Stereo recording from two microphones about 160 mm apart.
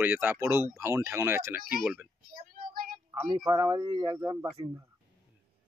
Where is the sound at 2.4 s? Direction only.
65° right (ahead or behind).